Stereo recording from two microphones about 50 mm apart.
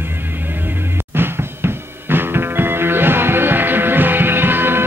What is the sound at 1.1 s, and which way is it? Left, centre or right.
Music, right.